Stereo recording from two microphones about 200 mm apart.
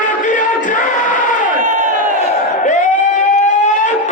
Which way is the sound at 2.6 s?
40° left (ahead or behind).